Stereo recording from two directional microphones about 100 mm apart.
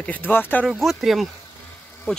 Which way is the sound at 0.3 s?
20° left (ahead or behind).